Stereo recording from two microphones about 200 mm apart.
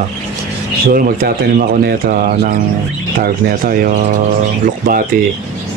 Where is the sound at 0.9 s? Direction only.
45° right (ahead or behind).